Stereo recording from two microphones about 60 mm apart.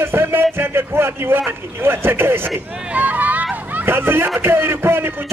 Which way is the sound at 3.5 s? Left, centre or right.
Right.